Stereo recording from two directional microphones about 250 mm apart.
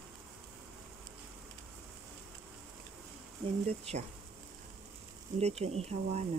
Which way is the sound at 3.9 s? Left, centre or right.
Right.